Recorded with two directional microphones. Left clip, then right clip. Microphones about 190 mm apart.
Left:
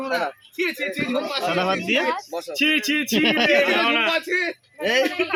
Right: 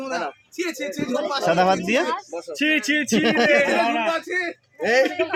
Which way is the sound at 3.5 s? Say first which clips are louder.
Even; 35° right (ahead or behind).